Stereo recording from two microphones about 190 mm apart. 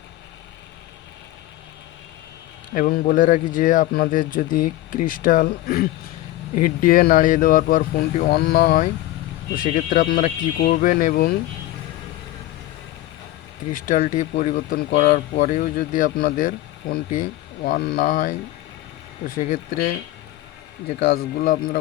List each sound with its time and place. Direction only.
2.7 s speech: 50° left (ahead or behind)
13.7 s speech: 45° left (ahead or behind)
21.3 s speech: 45° left (ahead or behind)